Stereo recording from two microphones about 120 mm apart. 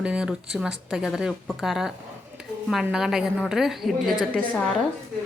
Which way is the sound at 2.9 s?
5° right (ahead or behind).